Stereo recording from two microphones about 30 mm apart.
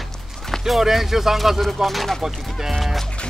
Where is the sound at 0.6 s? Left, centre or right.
Centre.